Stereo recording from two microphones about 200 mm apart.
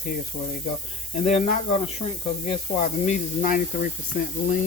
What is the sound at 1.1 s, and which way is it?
Speech, 35° left (ahead or behind).